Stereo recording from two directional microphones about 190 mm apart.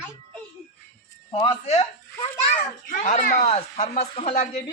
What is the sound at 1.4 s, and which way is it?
Speech, 30° left (ahead or behind).